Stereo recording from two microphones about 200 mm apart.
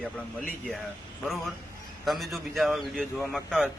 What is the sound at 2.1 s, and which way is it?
A man's voice, centre (ahead or behind).